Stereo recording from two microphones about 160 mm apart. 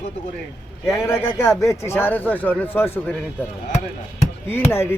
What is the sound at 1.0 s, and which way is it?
Speech, 15° left (ahead or behind).